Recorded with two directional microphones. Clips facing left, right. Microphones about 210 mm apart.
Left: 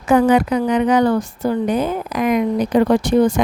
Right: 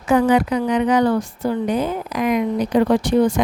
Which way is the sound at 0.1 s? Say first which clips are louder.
Left 2 dB; 50° left (ahead or behind).